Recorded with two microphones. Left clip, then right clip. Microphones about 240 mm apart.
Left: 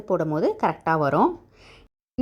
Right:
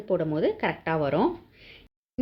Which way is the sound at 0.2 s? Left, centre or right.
Left.